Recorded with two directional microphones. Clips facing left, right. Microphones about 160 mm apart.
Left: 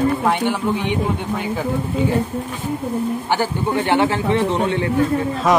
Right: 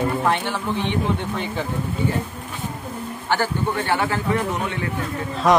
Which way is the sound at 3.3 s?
20° left (ahead or behind).